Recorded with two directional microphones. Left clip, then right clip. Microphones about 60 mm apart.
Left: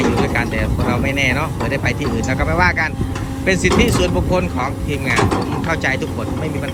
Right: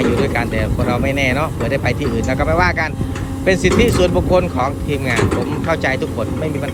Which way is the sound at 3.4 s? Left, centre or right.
Right.